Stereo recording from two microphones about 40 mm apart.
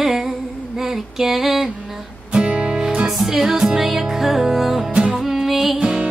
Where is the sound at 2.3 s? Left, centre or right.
Right.